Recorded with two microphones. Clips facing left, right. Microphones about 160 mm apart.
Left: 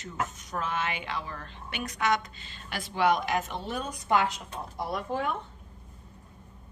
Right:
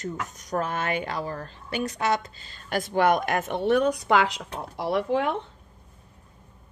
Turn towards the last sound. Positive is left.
turn(degrees=-90)